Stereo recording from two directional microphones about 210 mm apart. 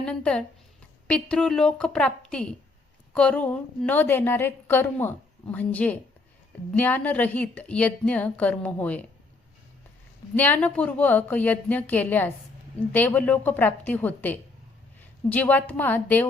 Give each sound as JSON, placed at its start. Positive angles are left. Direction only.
{"t": 0.0, "sound": "a woman's voice", "side_deg": 5}
{"t": 10.3, "sound": "a woman's voice", "side_deg": 10}